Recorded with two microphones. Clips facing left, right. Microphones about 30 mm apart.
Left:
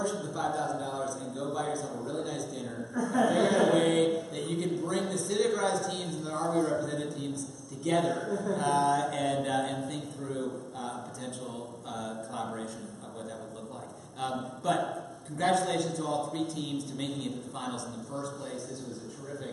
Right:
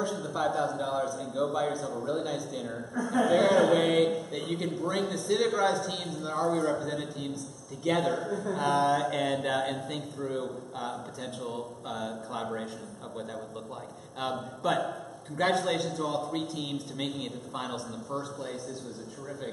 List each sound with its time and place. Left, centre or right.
0.0 s a man's voice: centre
2.9 s a man's voice: centre
14.6 s a man's voice: centre